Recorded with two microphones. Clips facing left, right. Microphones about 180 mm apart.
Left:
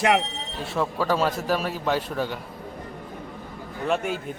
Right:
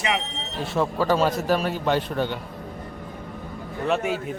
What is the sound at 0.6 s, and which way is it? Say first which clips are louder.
A man's voice: right 2 dB; centre (ahead or behind).